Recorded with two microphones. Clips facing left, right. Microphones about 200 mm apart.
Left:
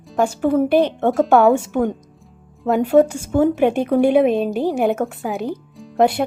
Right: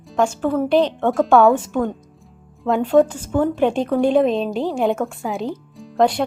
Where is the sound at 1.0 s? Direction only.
5° left (ahead or behind).